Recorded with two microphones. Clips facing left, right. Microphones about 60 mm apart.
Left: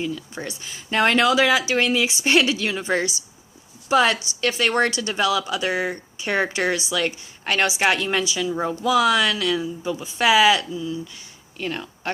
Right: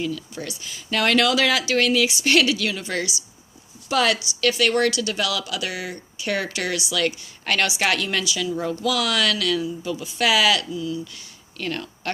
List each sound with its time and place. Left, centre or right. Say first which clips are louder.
0.0 s a woman's voice: even; left; by 12.1 s centre